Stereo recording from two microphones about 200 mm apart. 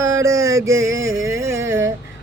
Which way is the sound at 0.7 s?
80° right.